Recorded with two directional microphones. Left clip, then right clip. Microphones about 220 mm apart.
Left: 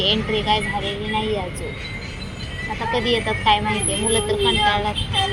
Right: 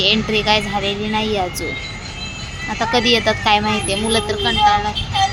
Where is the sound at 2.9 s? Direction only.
30° right (ahead or behind).